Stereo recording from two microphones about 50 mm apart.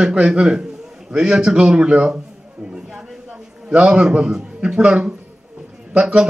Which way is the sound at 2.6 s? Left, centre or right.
Centre.